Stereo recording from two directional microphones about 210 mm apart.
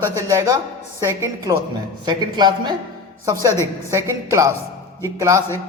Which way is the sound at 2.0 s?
20° right (ahead or behind).